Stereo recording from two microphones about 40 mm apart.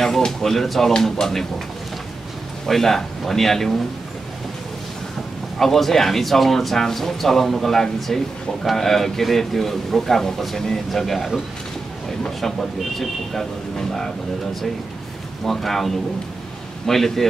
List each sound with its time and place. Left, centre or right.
0.0 s speech: centre
0.9 s speech: centre
1.2 s speech: centre
2.6 s speech: centre
5.6 s speech: centre
12.4 s speech: centre
15.4 s speech: centre